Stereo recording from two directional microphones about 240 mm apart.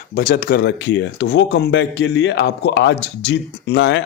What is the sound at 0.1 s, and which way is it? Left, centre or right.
Speech, left.